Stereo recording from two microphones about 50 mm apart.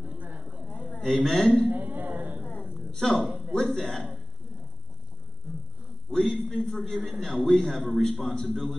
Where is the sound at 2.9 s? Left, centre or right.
Centre.